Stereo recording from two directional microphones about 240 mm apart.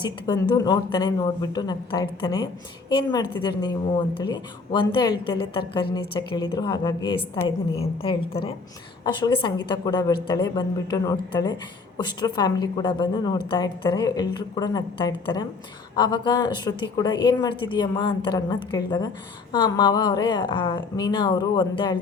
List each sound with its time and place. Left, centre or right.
0.0 s a woman's voice: centre